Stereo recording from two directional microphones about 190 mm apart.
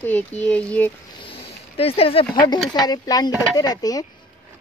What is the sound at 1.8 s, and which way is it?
Speech, 30° left (ahead or behind).